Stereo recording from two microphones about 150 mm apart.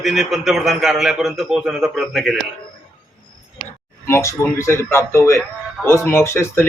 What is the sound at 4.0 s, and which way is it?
A man's voice, 20° left (ahead or behind).